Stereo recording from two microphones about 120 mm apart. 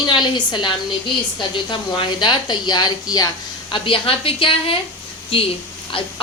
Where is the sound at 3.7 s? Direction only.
45° left (ahead or behind).